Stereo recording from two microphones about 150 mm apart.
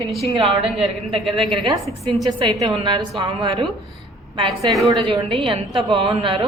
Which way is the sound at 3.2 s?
35° right (ahead or behind).